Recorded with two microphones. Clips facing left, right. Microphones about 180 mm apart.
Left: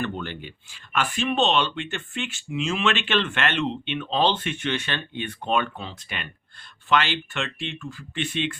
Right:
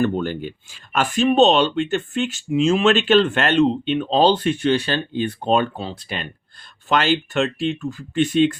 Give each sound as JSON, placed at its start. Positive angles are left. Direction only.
{"t": 0.0, "sound": "speech", "side_deg": -40}